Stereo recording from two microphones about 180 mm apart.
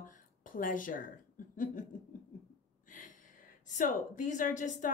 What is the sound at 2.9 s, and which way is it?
A woman's voice, 45° left (ahead or behind).